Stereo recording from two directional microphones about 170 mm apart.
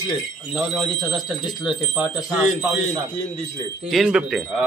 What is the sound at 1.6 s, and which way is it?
Speech, 5° right (ahead or behind).